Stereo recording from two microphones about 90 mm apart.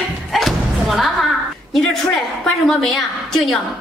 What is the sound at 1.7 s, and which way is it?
A woman's voice, 5° left (ahead or behind).